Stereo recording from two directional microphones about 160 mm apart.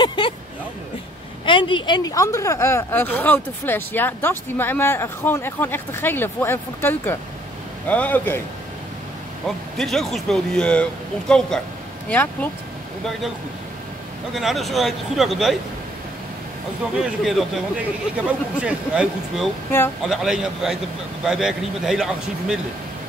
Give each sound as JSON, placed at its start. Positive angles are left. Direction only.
{"t": 0.0, "sound": "a sound", "side_deg": 30}
{"t": 1.4, "sound": "speech", "side_deg": 30}
{"t": 9.8, "sound": "a man's voice", "side_deg": 0}
{"t": 14.3, "sound": "a man's voice", "side_deg": 0}
{"t": 17.0, "sound": "a man's voice", "side_deg": 0}